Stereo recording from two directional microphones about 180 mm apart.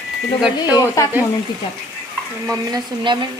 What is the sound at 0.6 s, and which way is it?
Speech, 20° left (ahead or behind).